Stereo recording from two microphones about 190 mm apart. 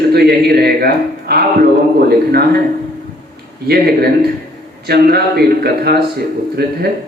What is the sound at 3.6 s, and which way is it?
A man's voice, 55° right (ahead or behind).